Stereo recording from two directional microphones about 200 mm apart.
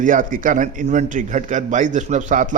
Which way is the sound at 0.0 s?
40° right (ahead or behind).